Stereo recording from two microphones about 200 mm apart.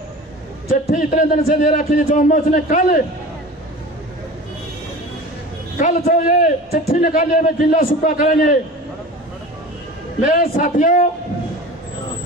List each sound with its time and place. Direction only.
0.7 s a man's voice: 45° left (ahead or behind)
5.8 s a man's voice: 40° left (ahead or behind)
10.3 s a man's voice: 45° left (ahead or behind)